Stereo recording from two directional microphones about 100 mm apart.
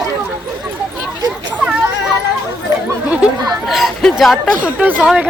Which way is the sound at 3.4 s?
40° right (ahead or behind).